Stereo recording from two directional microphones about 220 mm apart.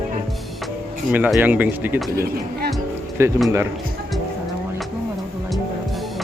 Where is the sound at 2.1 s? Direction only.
45° right (ahead or behind).